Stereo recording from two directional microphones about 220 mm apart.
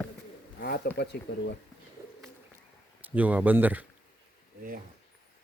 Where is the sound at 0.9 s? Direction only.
50° left (ahead or behind).